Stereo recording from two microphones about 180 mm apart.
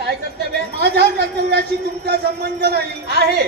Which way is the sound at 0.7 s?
65° right (ahead or behind).